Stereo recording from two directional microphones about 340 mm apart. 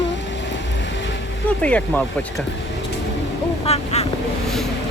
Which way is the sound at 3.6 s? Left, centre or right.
Centre.